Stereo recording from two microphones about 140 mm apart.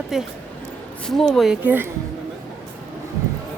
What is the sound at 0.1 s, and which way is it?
Speech, centre (ahead or behind).